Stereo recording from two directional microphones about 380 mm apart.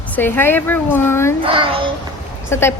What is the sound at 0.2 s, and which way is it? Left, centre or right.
Speech, centre.